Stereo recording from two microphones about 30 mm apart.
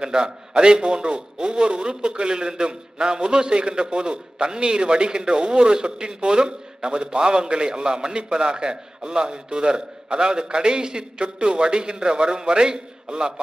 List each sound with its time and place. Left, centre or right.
0.0 s a man's voice: right